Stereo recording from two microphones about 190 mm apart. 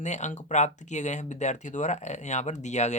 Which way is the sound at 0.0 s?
40° left (ahead or behind).